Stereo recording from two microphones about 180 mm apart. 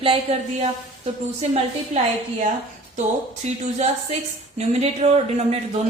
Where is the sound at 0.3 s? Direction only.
35° right (ahead or behind).